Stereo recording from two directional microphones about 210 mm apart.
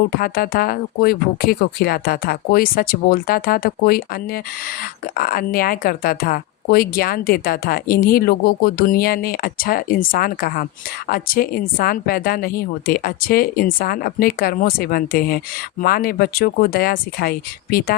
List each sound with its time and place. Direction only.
0.1 s speech: 45° left (ahead or behind)